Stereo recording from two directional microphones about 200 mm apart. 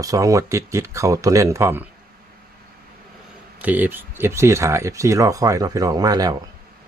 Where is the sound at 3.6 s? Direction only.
10° right (ahead or behind).